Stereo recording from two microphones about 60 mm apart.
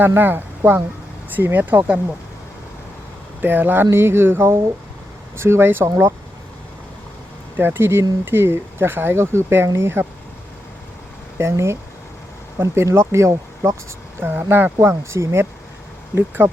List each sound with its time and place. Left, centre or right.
0.0 s speech: right
3.4 s speech: right
7.5 s speech: right
11.3 s speech: right
14.2 s speech: right
16.1 s speech: right